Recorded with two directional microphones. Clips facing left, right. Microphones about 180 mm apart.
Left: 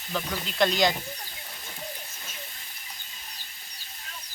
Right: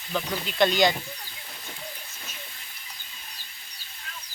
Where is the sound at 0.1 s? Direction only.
Centre (ahead or behind).